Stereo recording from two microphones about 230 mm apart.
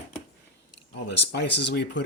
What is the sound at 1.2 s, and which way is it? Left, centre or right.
Speech, left.